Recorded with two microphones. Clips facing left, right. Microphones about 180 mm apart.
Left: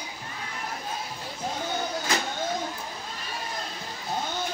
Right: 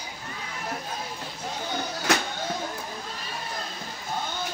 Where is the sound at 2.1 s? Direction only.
75° right (ahead or behind).